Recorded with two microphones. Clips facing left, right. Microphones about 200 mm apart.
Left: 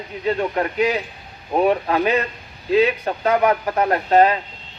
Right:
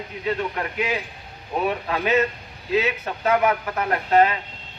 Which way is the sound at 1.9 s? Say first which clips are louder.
Left 2 dB; 35° left (ahead or behind).